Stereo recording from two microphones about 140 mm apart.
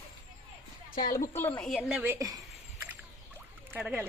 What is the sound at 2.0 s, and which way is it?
Speech, 15° right (ahead or behind).